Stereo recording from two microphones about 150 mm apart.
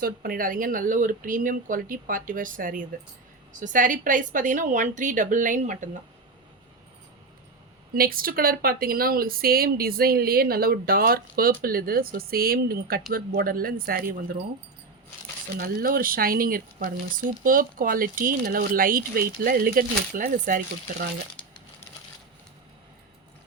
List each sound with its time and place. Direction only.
0.0 s speech: 75° right (ahead or behind); by 6.0 s 60° right (ahead or behind)
7.9 s speech: 75° right (ahead or behind)
13.1 s speech: 80° right
15.5 s speech: 90° right; by 19.2 s 70° right (ahead or behind)
19.4 s speech: 80° right; by 20.6 s 60° right (ahead or behind)